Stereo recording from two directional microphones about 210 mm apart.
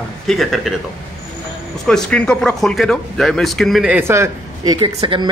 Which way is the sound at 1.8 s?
5° left (ahead or behind).